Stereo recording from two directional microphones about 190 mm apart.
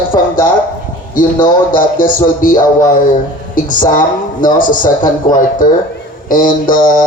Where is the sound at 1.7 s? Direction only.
45° left (ahead or behind).